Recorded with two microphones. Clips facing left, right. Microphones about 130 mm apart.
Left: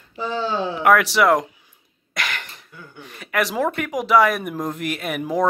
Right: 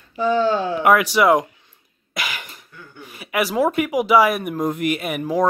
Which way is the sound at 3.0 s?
5° right (ahead or behind).